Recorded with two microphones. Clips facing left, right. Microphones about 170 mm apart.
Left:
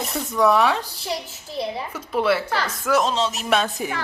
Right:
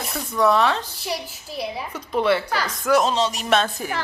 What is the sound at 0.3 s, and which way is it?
Speech, 10° left (ahead or behind).